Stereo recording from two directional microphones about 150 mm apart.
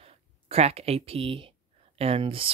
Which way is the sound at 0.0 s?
45° right (ahead or behind).